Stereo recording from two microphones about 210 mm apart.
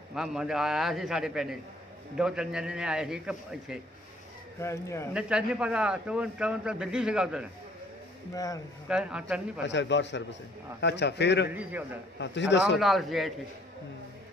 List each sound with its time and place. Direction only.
0.1 s a man's voice: centre (ahead or behind)
4.6 s speech: 15° left (ahead or behind)
5.1 s a man's voice: 5° right (ahead or behind)
8.8 s a man's voice: 5° right (ahead or behind)
9.7 s a man's voice: 60° left (ahead or behind)
11.5 s a man's voice: 10° right (ahead or behind)
12.2 s a man's voice: 60° left (ahead or behind)
12.7 s a man's voice: centre (ahead or behind)